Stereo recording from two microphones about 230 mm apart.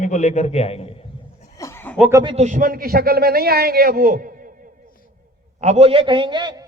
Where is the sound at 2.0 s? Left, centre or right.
Centre.